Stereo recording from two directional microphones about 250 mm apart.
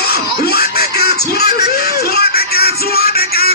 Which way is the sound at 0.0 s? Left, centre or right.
Left.